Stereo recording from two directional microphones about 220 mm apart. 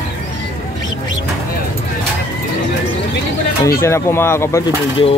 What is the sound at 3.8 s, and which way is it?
Speech, 10° left (ahead or behind).